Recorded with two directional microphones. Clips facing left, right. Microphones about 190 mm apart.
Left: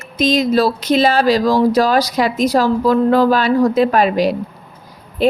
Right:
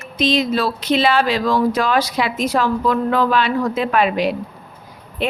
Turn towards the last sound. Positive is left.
turn(degrees=35)  # may be behind; listen again after turning